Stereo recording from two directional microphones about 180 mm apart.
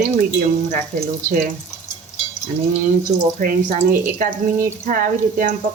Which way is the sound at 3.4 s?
50° right (ahead or behind).